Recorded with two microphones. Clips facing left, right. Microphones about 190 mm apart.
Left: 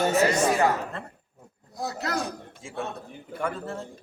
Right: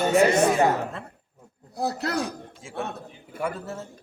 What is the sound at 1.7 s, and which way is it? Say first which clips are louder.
Speech: right 4 dB; 35° right (ahead or behind).